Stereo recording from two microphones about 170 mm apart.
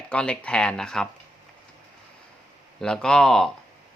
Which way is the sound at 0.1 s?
5° left (ahead or behind).